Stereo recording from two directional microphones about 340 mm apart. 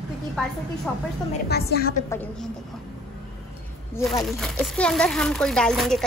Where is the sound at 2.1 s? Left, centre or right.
Centre.